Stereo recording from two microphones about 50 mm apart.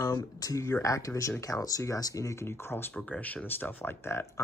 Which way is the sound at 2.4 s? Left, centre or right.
Left.